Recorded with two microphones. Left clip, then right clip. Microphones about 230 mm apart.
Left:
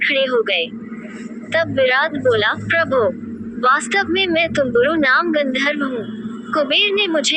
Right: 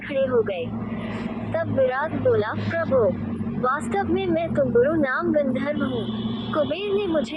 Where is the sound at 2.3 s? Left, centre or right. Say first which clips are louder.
Left 7 dB; left.